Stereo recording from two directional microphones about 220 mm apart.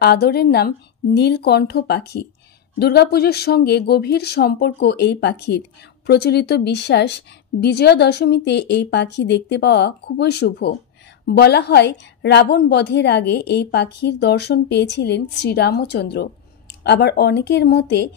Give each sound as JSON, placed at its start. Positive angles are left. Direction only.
{"t": 0.0, "sound": "a woman's voice", "side_deg": 45}